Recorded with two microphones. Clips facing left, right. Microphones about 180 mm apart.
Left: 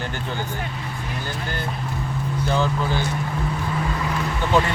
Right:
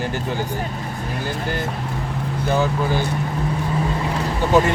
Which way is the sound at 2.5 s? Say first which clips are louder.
Right 3 dB; 10° right (ahead or behind).